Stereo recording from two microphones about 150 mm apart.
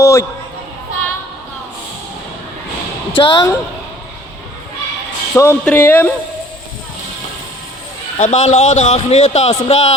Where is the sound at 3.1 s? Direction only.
30° left (ahead or behind).